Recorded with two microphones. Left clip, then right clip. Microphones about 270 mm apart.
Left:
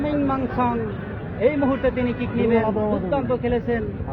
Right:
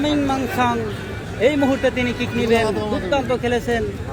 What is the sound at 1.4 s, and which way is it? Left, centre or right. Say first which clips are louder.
Speech: right 3 dB; right.